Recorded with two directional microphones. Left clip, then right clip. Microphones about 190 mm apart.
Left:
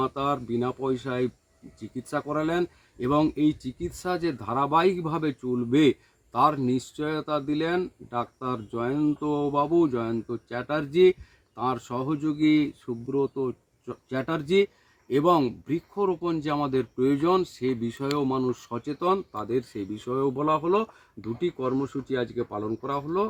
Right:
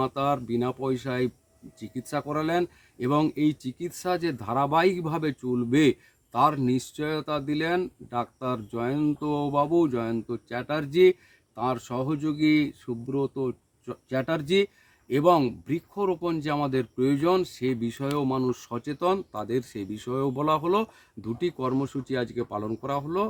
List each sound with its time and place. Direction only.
0.0 s speech: 25° right (ahead or behind)